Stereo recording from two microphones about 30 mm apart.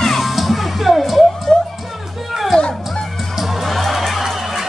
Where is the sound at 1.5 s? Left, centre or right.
Centre.